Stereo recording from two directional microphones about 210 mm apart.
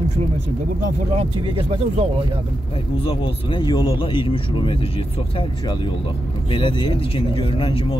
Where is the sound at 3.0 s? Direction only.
25° left (ahead or behind).